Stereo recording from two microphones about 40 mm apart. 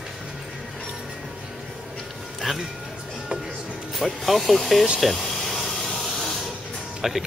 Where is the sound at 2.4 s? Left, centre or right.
Centre.